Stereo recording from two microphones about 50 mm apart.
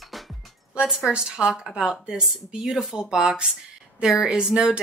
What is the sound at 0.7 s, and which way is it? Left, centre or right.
Speech, centre.